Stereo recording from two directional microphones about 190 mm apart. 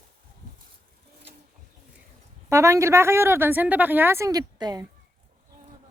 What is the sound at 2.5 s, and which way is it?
Speech, 15° right (ahead or behind).